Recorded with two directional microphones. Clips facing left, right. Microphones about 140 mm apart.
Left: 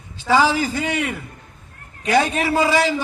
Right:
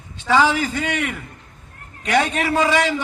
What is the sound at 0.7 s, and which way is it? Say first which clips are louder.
Speech: left 1 dB; 30° left (ahead or behind).